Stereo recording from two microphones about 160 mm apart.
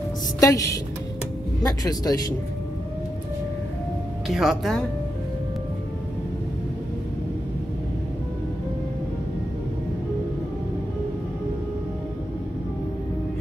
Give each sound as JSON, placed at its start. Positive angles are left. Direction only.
{"t": 0.4, "sound": "speech", "side_deg": 20}
{"t": 4.3, "sound": "speech", "side_deg": 0}